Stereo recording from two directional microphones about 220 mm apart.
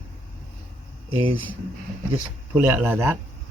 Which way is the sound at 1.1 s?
25° right (ahead or behind).